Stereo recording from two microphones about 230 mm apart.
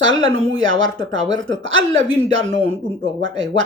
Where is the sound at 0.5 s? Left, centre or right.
Right.